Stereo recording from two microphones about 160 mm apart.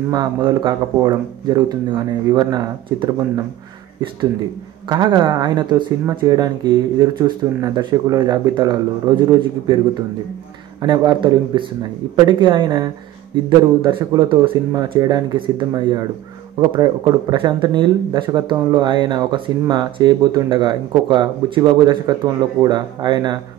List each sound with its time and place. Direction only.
0.1 s speech: 25° right (ahead or behind)
4.8 s speech: 25° right (ahead or behind)
10.8 s speech: 30° right (ahead or behind)